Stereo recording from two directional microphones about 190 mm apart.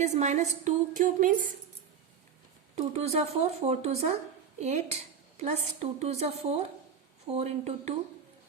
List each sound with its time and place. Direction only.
0.0 s a woman's voice: 40° right (ahead or behind)
2.7 s a woman's voice: 35° right (ahead or behind)